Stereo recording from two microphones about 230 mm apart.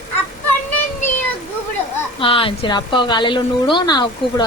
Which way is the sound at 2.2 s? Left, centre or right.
Left.